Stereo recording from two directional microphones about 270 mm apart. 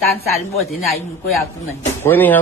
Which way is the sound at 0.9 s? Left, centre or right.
Centre.